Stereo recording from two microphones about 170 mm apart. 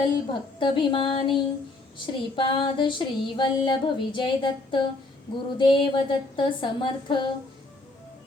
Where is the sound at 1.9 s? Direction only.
30° left (ahead or behind).